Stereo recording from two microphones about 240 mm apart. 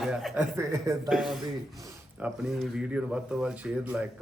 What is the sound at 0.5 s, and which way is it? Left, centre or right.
Mantra, centre.